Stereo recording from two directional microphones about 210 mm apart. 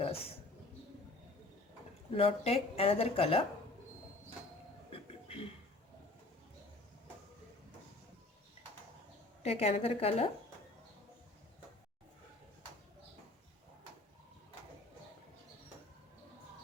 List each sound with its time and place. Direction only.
0.0 s a sound: 30° left (ahead or behind)
2.1 s speech: 30° left (ahead or behind)
9.4 s speech: 30° left (ahead or behind)